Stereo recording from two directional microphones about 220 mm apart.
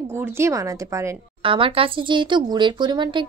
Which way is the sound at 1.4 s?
25° right (ahead or behind).